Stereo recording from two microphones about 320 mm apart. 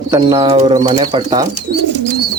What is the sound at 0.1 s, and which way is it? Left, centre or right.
Speech, centre.